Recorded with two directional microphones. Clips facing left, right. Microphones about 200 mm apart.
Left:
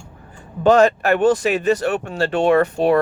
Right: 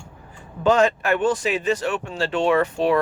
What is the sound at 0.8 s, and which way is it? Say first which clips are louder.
Speech: left 4 dB; 40° left (ahead or behind).